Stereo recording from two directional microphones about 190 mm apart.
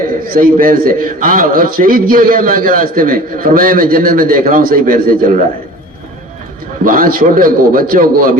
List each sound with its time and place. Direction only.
0.3 s a man's voice: 50° right (ahead or behind)
6.8 s a man's voice: 50° right (ahead or behind)